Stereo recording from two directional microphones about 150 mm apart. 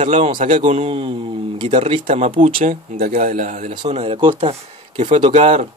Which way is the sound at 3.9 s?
45° right (ahead or behind).